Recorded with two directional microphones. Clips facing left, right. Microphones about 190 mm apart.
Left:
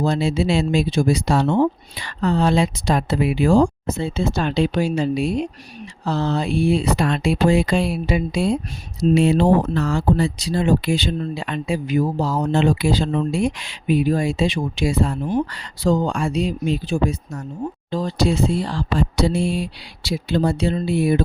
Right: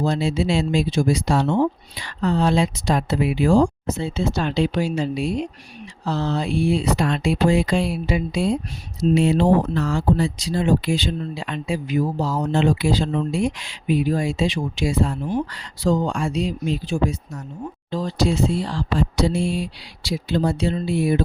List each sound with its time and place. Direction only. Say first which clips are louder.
0.0 s speech: left 2 dB; 65° left (ahead or behind)